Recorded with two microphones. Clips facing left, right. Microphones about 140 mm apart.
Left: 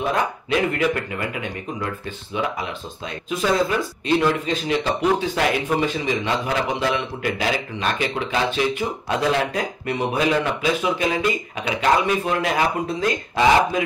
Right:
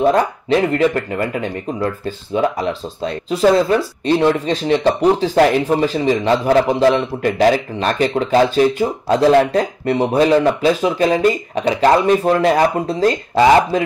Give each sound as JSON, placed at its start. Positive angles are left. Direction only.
{"t": 0.0, "sound": "speech", "side_deg": -35}